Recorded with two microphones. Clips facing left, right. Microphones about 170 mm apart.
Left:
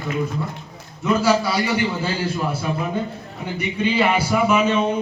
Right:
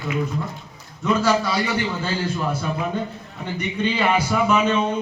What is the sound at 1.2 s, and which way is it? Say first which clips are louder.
Speech: left 2 dB; 10° left (ahead or behind).